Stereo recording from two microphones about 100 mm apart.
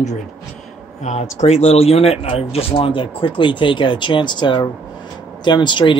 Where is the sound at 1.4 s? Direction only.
90° left.